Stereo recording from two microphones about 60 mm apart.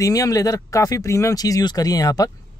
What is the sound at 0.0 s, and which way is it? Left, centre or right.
Speech, left.